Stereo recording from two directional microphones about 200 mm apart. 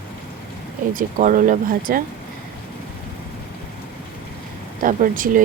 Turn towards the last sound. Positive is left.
turn(degrees=-40)  # may be behind; listen again after turning